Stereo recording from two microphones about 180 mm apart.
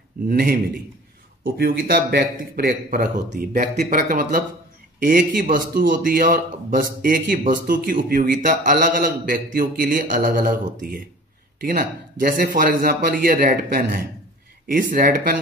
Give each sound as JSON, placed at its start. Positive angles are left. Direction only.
{"t": 0.3, "sound": "a man's voice", "side_deg": -50}